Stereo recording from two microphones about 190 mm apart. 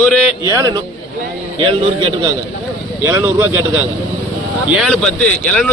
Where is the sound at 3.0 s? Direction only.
10° right (ahead or behind); by 5.7 s 5° left (ahead or behind).